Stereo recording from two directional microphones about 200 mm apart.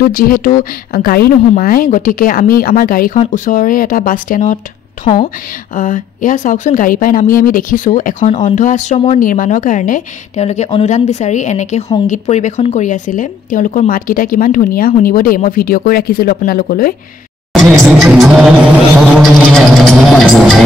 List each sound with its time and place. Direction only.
0.0 s speech: 45° left (ahead or behind)
17.5 s speech: centre (ahead or behind)